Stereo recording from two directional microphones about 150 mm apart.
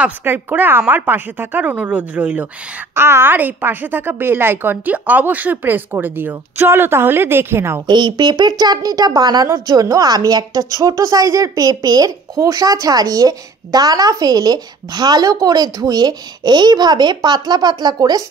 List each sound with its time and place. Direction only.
0.0 s a woman's voice: 10° right (ahead or behind)
7.8 s speech: 30° right (ahead or behind)